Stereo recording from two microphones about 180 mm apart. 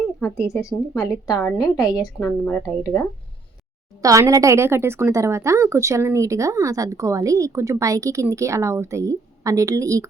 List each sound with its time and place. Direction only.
0.0 s a sound: 5° left (ahead or behind)
0.4 s a woman's voice: 15° left (ahead or behind)
4.0 s a woman's voice: 20° right (ahead or behind)